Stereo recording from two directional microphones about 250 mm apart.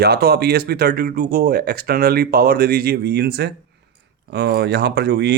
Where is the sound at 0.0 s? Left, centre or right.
Right.